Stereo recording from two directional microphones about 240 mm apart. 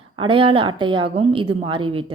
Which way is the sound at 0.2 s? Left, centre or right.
Right.